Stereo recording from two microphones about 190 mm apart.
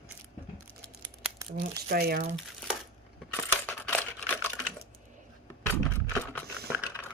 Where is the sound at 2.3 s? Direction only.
Centre (ahead or behind).